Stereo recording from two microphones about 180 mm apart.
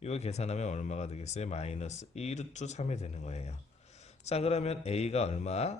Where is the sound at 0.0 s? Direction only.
35° left (ahead or behind).